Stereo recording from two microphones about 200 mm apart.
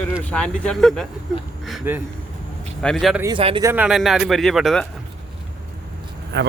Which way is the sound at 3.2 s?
25° right (ahead or behind).